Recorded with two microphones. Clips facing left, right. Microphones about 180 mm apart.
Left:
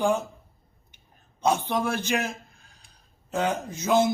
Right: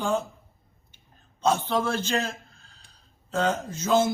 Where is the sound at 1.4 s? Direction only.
15° left (ahead or behind).